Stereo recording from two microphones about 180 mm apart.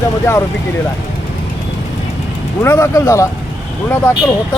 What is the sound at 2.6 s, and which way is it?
Speech, 15° left (ahead or behind).